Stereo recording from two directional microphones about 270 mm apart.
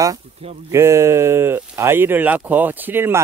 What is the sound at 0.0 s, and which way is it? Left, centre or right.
Speech, centre.